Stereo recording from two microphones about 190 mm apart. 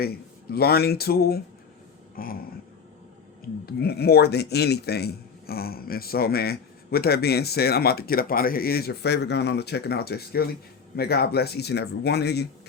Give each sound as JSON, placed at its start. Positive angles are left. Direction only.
{"t": 0.0, "sound": "speech", "side_deg": 55}
{"t": 2.1, "sound": "a sound", "side_deg": 50}
{"t": 3.7, "sound": "speech", "side_deg": 55}